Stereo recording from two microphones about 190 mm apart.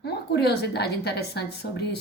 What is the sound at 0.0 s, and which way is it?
A woman's voice, 60° left (ahead or behind).